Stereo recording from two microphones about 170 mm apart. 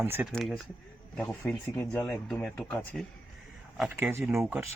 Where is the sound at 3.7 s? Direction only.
10° right (ahead or behind).